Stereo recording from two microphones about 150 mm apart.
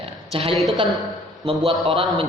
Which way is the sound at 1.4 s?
35° right (ahead or behind).